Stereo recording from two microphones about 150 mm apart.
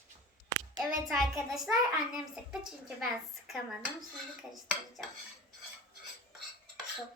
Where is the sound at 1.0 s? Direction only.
Centre (ahead or behind).